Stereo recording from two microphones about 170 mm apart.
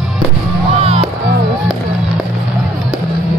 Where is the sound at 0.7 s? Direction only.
35° right (ahead or behind).